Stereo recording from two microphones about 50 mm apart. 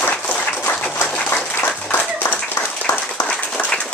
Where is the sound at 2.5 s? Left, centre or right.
Left.